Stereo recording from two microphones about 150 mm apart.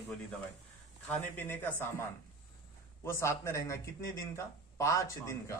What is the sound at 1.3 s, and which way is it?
Speech, 15° left (ahead or behind).